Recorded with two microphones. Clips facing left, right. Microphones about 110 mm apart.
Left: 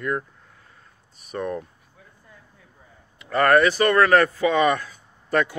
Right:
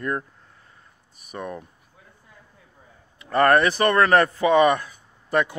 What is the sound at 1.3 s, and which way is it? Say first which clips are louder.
Speech: left 5 dB; 10° right (ahead or behind).